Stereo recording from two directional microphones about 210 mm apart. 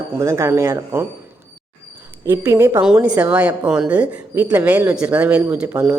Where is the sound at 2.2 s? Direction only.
10° right (ahead or behind).